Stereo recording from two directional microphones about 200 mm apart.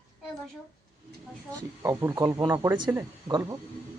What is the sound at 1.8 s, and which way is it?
Speech, 15° right (ahead or behind).